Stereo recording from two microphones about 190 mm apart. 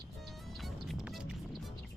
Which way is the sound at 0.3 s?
Centre (ahead or behind).